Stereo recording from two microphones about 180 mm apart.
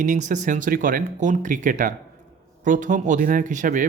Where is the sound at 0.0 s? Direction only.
45° right (ahead or behind).